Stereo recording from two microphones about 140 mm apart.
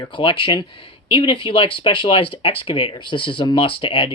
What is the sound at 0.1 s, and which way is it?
Speech, 35° left (ahead or behind).